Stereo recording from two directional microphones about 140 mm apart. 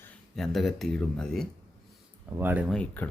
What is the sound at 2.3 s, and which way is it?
Speech, 15° right (ahead or behind).